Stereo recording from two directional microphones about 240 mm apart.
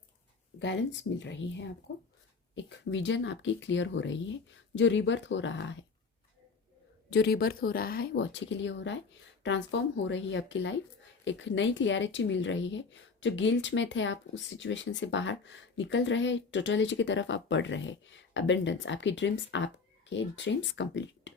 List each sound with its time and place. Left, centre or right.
1.2 s speech: left
7.1 s speech: left